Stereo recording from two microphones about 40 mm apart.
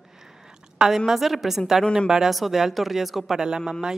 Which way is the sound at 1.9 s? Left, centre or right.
Centre.